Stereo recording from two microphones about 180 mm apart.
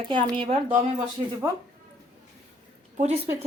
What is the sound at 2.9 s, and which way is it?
Speech, 40° right (ahead or behind).